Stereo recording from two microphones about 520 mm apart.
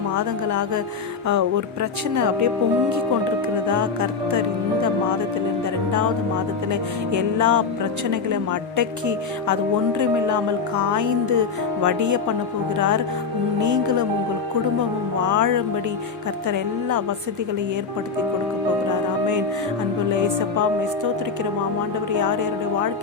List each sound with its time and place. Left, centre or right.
1.3 s music: right
3.7 s music: right
7.1 s music: right
13.6 s music: right
20.1 s music: right
22.1 s music: right